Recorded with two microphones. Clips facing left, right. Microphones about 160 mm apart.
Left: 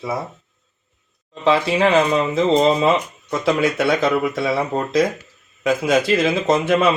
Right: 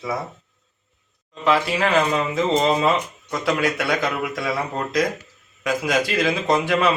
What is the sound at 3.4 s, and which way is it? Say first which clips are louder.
Speech: left 4 dB; 25° left (ahead or behind).